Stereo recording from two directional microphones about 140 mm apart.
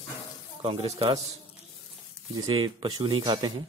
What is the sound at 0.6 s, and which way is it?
Speech, 40° right (ahead or behind).